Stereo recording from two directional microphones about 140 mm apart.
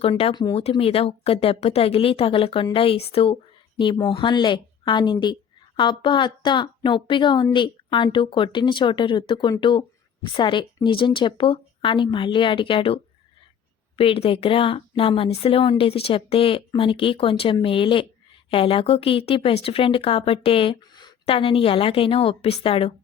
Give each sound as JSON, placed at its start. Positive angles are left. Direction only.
{"t": 0.0, "sound": "a woman's voice", "side_deg": 40}